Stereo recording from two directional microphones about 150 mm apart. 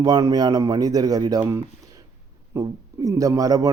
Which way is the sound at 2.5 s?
20° right (ahead or behind).